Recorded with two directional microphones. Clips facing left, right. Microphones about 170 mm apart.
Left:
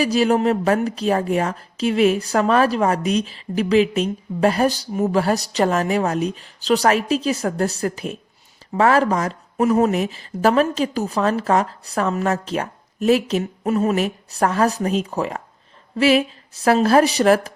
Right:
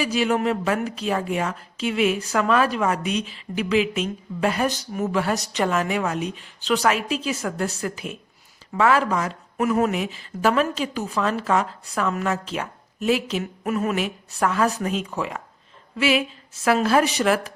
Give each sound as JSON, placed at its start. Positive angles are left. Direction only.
{"t": 0.0, "sound": "a woman's voice", "side_deg": 40}